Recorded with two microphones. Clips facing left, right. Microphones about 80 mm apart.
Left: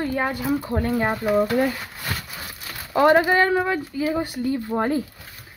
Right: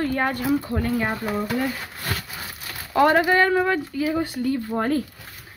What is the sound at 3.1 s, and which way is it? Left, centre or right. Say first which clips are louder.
Speech: left 1 dB; centre.